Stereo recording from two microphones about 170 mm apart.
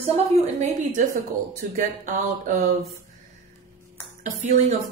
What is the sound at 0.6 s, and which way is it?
Speech, 50° right (ahead or behind).